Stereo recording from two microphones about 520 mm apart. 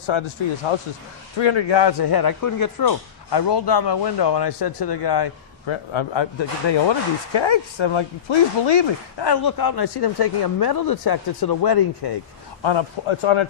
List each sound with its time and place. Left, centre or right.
0.1 s a man's voice: left
12.6 s a man's voice: left